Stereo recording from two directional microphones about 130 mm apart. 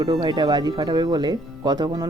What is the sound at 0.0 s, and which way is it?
Speech, 35° right (ahead or behind).